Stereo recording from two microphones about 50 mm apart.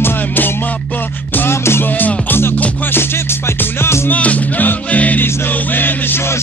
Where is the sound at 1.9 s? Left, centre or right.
Left.